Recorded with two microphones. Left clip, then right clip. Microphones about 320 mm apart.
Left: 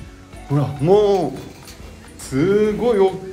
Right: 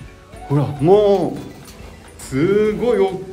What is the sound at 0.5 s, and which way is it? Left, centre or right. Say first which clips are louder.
Speech: right 2 dB; centre.